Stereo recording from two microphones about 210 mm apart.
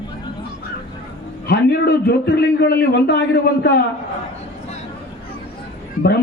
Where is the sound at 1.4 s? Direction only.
50° left (ahead or behind).